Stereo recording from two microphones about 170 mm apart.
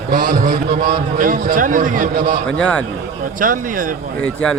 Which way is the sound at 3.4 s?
50° right (ahead or behind).